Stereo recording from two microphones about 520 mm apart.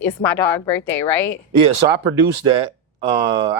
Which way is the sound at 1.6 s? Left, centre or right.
Right.